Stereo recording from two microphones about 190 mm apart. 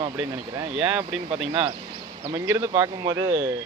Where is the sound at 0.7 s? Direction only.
5° right (ahead or behind).